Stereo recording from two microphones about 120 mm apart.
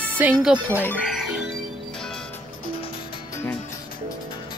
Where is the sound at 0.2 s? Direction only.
10° right (ahead or behind).